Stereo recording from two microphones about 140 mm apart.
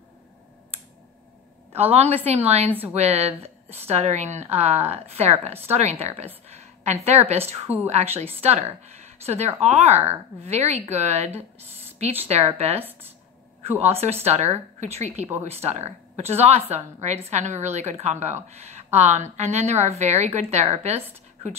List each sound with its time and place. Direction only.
1.8 s a woman's voice: 45° right (ahead or behind)
7.6 s a woman's voice: 15° right (ahead or behind)
7.9 s a woman's voice: 50° right (ahead or behind)
13.8 s a woman's voice: 50° right (ahead or behind)